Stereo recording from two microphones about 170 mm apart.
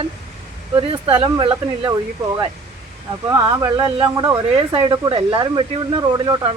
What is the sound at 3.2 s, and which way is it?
Speech, 20° right (ahead or behind).